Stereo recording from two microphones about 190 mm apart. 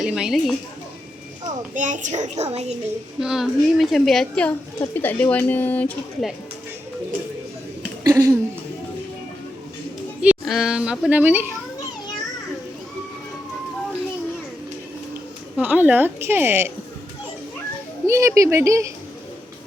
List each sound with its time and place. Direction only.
0.0 s a woman's voice: 5° right (ahead or behind)
1.7 s a child's voice: 40° right (ahead or behind)
3.2 s a woman's voice: 5° right (ahead or behind)
8.0 s a sound: 15° right (ahead or behind)
10.2 s speech: centre (ahead or behind)
15.5 s speech: 10° right (ahead or behind)
18.0 s speech: 15° right (ahead or behind)